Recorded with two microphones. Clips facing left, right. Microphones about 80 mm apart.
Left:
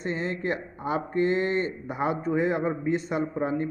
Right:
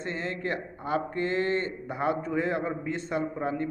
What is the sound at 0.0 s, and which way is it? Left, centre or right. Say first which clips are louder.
Speech: left 3 dB; left.